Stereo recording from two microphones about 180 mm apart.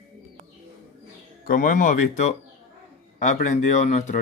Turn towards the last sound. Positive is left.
turn(degrees=40)  # may be behind; listen again after turning